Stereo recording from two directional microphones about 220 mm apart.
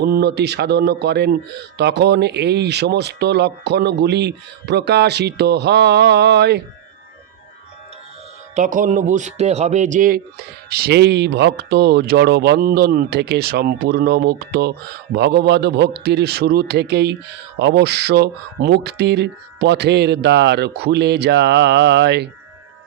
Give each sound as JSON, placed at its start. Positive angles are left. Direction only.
{"t": 0.0, "sound": "speech", "side_deg": -45}
{"t": 8.5, "sound": "speech", "side_deg": -35}